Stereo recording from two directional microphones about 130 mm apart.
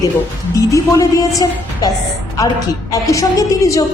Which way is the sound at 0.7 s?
25° left (ahead or behind).